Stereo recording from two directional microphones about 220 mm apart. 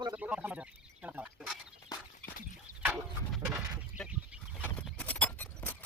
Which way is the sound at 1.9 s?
15° left (ahead or behind).